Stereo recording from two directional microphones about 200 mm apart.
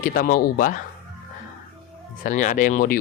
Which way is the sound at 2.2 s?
40° left (ahead or behind).